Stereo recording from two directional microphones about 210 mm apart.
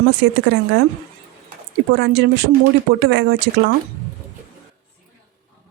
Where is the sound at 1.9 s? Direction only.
50° right (ahead or behind).